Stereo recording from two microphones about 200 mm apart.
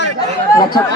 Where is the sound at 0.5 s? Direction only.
20° left (ahead or behind).